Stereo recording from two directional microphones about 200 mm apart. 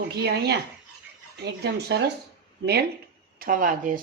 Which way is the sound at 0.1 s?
55° right (ahead or behind).